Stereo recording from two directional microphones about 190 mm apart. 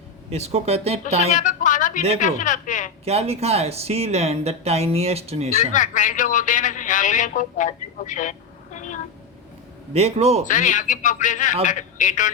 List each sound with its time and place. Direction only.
0.3 s speech: 35° right (ahead or behind)
1.3 s a sound: 40° left (ahead or behind)
2.2 s a man's voice: 40° left (ahead or behind)
3.0 s speech: 30° right (ahead or behind)
5.7 s a man's voice: 40° left (ahead or behind)
9.9 s speech: 35° right (ahead or behind)
10.4 s a man's voice: 40° left (ahead or behind)